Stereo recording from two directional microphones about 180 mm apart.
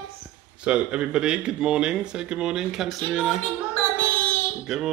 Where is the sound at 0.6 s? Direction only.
5° right (ahead or behind).